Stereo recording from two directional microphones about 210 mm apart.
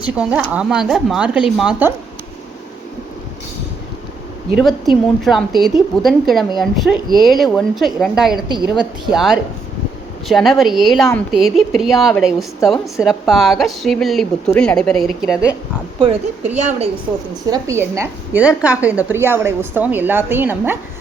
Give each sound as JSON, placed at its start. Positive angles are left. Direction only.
{"t": 0.0, "sound": "a woman's voice", "side_deg": -5}
{"t": 4.5, "sound": "a woman's voice", "side_deg": 0}
{"t": 16.0, "sound": "a woman's voice", "side_deg": -25}
{"t": 17.4, "sound": "a woman's voice", "side_deg": -15}